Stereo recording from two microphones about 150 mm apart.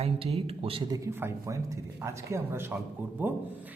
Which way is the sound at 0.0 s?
40° right (ahead or behind).